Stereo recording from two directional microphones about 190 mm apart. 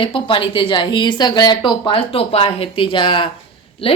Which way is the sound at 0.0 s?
30° left (ahead or behind).